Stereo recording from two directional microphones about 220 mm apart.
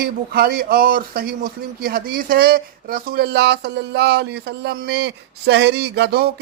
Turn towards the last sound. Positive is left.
turn(degrees=-50)  # may be behind; listen again after turning